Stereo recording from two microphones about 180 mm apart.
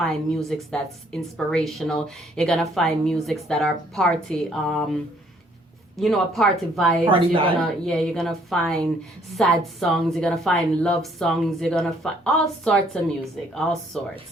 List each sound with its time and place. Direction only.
0.0 s a woman's voice: centre (ahead or behind)
6.0 s a woman's voice: centre (ahead or behind)
7.1 s a woman's voice: 30° right (ahead or behind)
7.6 s a woman's voice: centre (ahead or behind)